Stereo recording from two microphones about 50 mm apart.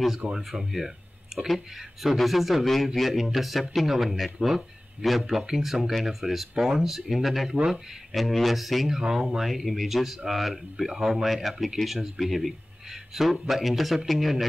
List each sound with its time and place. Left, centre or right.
0.3 s speech: centre